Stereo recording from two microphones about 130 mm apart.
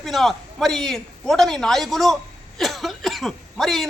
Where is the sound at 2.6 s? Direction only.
Centre (ahead or behind).